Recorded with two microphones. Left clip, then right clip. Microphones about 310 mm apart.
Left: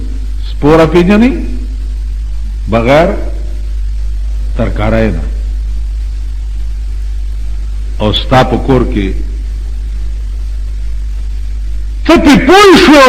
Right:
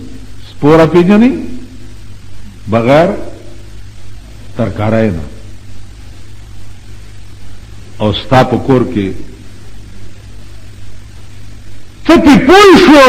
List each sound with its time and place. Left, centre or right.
0.6 s a man's voice: left
2.6 s a man's voice: left
4.5 s a man's voice: left
7.9 s a man's voice: left
12.0 s a man's voice: left